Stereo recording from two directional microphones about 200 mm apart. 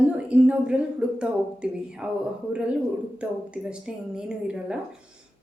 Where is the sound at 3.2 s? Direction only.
5° right (ahead or behind).